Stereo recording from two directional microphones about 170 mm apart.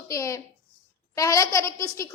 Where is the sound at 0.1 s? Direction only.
20° left (ahead or behind).